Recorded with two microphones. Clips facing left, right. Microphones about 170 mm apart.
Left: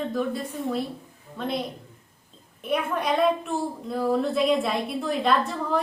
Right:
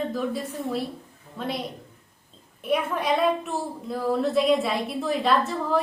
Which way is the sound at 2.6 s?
Centre (ahead or behind).